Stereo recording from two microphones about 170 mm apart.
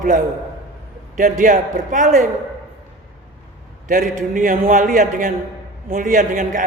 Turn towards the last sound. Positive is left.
turn(degrees=-50)  # may be behind; listen again after turning